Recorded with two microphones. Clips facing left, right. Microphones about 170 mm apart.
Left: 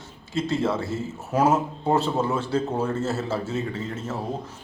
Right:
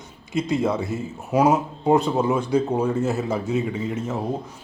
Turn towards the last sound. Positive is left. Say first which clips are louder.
# right 4 dB
turn(degrees=-15)  # may be behind; listen again after turning